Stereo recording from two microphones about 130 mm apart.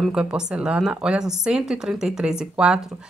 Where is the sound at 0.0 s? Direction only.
5° right (ahead or behind).